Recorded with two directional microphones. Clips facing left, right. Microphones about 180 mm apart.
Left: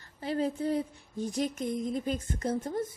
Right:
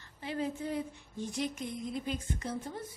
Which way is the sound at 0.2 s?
40° left (ahead or behind).